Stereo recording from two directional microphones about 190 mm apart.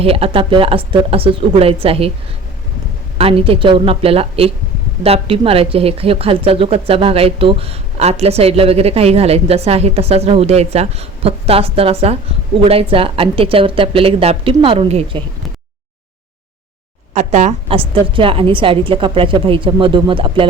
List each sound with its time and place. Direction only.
0.0 s a woman's voice: 30° right (ahead or behind)
3.2 s a woman's voice: 30° right (ahead or behind)
17.2 s a woman's voice: 35° right (ahead or behind)